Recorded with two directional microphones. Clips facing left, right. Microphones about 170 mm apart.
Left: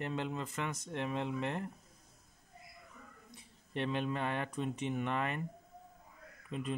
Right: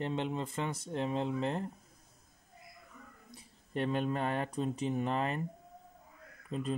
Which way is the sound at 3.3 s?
40° right (ahead or behind).